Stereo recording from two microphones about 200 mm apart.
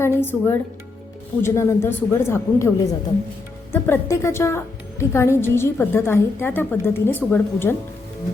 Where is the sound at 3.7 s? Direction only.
10° left (ahead or behind).